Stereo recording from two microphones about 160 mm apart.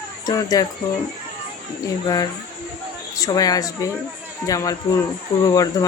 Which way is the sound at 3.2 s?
20° left (ahead or behind).